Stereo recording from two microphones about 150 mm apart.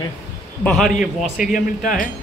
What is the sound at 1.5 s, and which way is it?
Speech, 60° left (ahead or behind).